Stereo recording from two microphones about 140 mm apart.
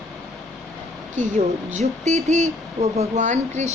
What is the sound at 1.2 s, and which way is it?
A woman's voice, 55° right (ahead or behind).